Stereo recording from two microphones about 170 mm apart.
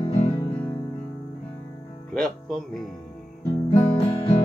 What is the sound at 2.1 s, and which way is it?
Speech, centre (ahead or behind).